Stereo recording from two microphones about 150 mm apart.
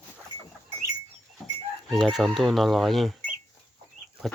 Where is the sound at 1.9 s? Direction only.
Centre (ahead or behind).